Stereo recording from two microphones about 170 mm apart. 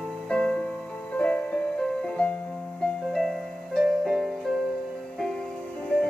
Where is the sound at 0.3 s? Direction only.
5° left (ahead or behind).